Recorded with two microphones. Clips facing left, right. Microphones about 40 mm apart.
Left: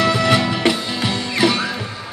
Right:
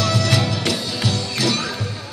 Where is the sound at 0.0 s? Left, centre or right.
Left.